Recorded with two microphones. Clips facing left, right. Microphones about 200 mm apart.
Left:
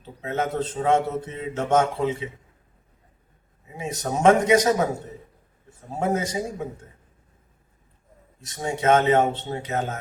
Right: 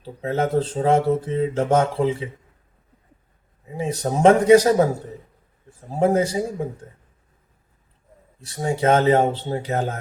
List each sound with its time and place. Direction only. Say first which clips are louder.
0.0 s speech: right 4 dB; 30° right (ahead or behind)
3.8 s speech: right 5 dB; 30° right (ahead or behind)
6.0 s speech: right 6 dB; 30° right (ahead or behind)
8.4 s speech: right 2 dB; 35° right (ahead or behind)